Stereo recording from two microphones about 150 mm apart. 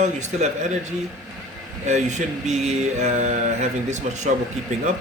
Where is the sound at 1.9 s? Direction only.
50° right (ahead or behind).